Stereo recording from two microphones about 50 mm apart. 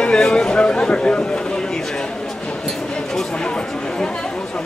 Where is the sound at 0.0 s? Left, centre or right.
Centre.